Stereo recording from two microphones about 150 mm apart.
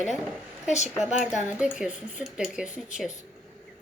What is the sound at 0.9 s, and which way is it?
Speech, 5° right (ahead or behind).